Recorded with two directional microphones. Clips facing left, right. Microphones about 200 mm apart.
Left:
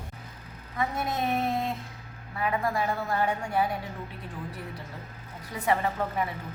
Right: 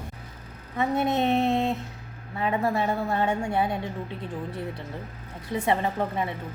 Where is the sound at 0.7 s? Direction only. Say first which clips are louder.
Right 6 dB; 25° right (ahead or behind).